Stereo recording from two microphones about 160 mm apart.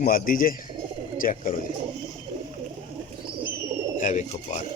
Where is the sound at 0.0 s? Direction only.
60° left (ahead or behind).